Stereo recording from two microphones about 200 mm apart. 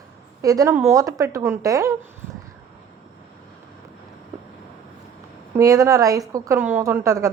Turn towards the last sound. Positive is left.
turn(degrees=-15)  # may be behind; listen again after turning